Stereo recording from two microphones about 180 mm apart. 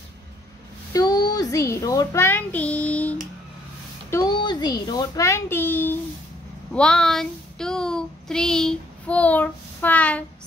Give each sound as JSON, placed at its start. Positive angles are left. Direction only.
{"t": 0.9, "sound": "a child's voice", "side_deg": 20}
{"t": 4.1, "sound": "a child's voice", "side_deg": 20}
{"t": 6.7, "sound": "child singing", "side_deg": 5}